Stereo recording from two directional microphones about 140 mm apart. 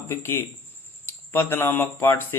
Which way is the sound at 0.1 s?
15° left (ahead or behind).